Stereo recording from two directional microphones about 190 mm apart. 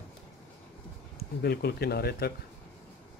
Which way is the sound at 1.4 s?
55° left (ahead or behind).